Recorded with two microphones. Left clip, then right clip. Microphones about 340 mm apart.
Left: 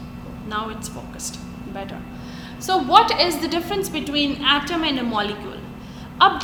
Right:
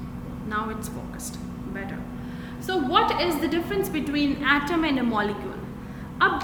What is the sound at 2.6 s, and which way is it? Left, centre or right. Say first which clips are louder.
A woman's voice: left 7 dB; centre.